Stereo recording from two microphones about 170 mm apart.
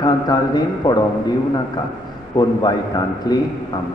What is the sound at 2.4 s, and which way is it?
A man's voice, 25° left (ahead or behind).